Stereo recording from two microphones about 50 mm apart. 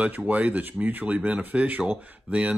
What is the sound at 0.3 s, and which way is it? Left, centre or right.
Speech, right.